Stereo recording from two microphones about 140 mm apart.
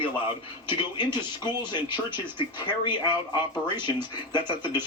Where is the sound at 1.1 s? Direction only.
30° left (ahead or behind).